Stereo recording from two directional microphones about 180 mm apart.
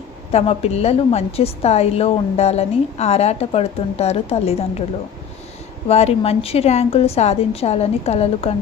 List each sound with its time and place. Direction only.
0.3 s a woman's voice: 35° left (ahead or behind)
5.9 s a woman's voice: 35° left (ahead or behind)